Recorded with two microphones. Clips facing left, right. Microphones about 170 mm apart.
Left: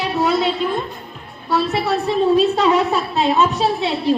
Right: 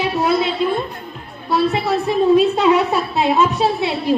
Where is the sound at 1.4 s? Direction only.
15° right (ahead or behind).